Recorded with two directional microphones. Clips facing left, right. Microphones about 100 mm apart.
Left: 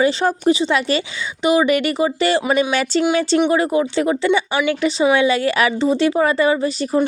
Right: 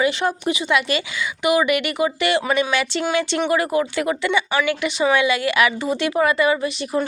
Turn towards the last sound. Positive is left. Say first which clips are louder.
# left 3 dB
turn(degrees=30)  # may be behind; listen again after turning